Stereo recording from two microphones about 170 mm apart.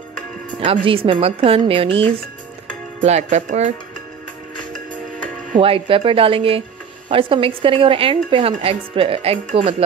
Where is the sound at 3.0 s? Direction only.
45° right (ahead or behind).